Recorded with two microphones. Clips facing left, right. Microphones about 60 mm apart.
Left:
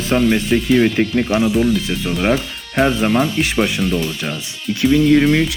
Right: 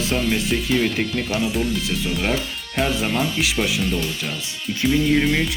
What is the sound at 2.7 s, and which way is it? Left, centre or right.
Speech, left.